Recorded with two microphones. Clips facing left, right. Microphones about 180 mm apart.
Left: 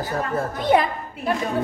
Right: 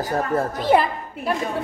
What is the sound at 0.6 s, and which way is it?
Speech, 5° right (ahead or behind).